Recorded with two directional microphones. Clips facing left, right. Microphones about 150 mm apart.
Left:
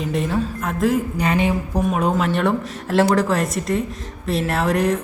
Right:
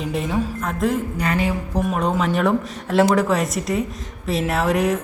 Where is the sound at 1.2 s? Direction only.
20° left (ahead or behind).